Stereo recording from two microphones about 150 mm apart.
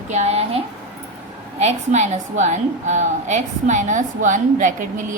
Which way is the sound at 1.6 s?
50° right (ahead or behind).